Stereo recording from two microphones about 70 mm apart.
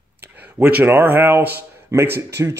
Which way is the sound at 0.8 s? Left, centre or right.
Right.